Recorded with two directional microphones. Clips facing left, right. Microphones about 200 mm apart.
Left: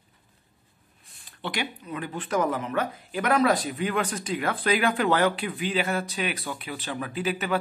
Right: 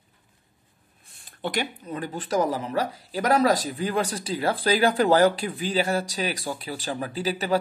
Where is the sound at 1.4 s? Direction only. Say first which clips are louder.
Right 3 dB; 45° right (ahead or behind).